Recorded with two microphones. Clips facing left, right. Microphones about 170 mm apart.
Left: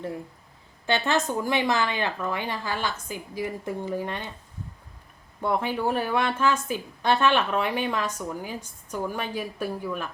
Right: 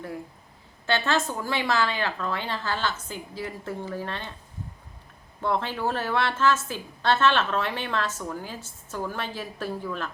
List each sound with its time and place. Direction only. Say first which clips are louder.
0.9 s a woman's voice: left 1 dB; 15° left (ahead or behind)
5.4 s a woman's voice: left 1 dB; 10° left (ahead or behind)